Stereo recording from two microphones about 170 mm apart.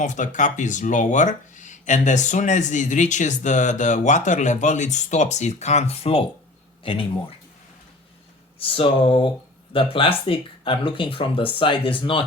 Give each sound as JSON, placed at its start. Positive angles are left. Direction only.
{"t": 0.0, "sound": "speech", "side_deg": 45}
{"t": 8.5, "sound": "speech", "side_deg": 30}